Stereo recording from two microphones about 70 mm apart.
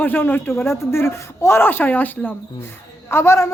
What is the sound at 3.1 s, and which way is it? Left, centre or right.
Speech, left.